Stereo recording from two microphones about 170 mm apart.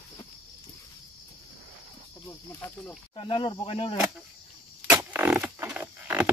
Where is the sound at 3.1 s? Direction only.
30° left (ahead or behind).